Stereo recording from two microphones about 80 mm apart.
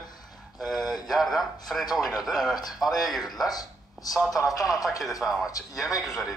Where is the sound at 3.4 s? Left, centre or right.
Left.